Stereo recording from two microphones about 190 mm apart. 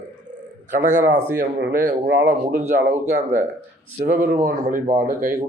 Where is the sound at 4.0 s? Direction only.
50° right (ahead or behind).